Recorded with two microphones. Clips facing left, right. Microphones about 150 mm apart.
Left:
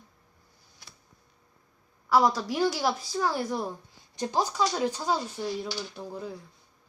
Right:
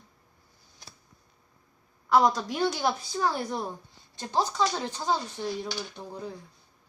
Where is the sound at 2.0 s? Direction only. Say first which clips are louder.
Right 1 dB; 5° left (ahead or behind).